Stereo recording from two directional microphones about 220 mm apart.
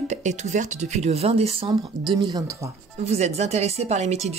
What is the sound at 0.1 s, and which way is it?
Speech, 30° right (ahead or behind).